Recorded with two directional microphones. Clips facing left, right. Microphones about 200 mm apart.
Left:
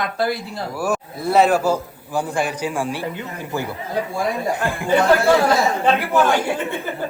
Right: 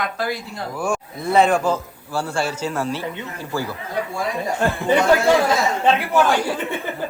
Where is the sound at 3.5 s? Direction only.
20° left (ahead or behind).